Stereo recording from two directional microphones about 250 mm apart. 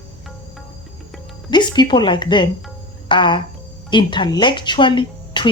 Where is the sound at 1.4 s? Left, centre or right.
Centre.